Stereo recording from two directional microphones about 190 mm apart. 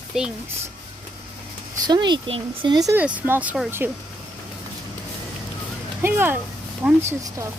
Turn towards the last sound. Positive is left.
turn(degrees=-15)  # may be behind; listen again after turning